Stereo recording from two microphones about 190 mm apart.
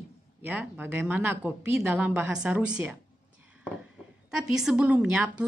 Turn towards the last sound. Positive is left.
turn(degrees=-5)  # may be behind; listen again after turning